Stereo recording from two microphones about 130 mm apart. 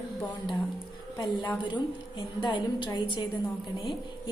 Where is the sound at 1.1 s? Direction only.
30° left (ahead or behind).